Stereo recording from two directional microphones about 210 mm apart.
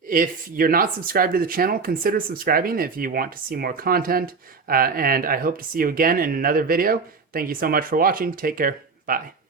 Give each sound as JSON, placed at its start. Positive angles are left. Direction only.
{"t": 0.1, "sound": "speech", "side_deg": -45}